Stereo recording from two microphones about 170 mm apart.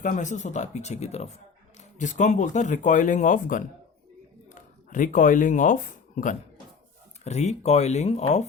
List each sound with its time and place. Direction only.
0.0 s speech: 45° left (ahead or behind)
7.3 s speech: 40° left (ahead or behind)